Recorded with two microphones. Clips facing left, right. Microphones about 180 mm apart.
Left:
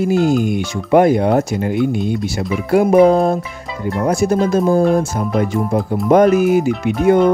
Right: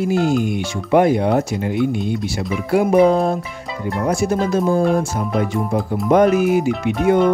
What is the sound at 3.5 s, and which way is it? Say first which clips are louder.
Speech: left 2 dB; centre (ahead or behind).